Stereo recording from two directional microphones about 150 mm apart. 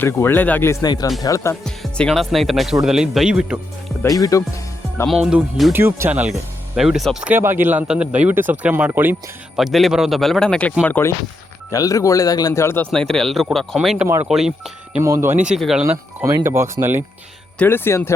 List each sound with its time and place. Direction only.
0.0 s speech: 15° left (ahead or behind)
1.6 s speech: 5° left (ahead or behind)
4.0 s speech: 20° left (ahead or behind)
5.0 s speech: 5° right (ahead or behind)
5.7 s speech: 15° right (ahead or behind)
9.6 s speech: centre (ahead or behind); by 12.9 s 15° left (ahead or behind)
12.9 s speech: 5° left (ahead or behind)
15.0 s speech: 15° right (ahead or behind); by 15.9 s centre (ahead or behind)
16.2 s speech: 20° right (ahead or behind)
17.6 s speech: 15° left (ahead or behind)